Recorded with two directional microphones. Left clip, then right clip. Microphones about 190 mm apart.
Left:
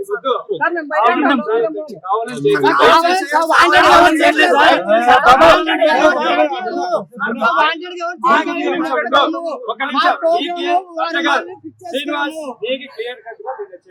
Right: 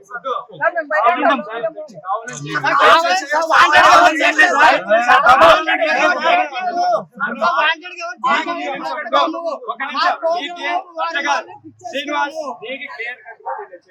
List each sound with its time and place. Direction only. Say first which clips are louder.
0.5 s a man's voice: right 4 dB; 30° left (ahead or behind)
9.6 s speech: left 4 dB; 35° left (ahead or behind)
12.0 s speech: right 1 dB; 45° left (ahead or behind)
12.4 s a man's voice: left 3 dB; 30° left (ahead or behind)